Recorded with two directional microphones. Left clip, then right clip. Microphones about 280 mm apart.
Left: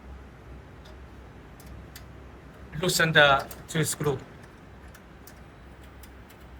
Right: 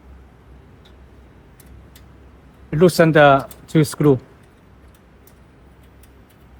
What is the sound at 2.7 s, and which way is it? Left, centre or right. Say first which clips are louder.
Speech: right 8 dB; right.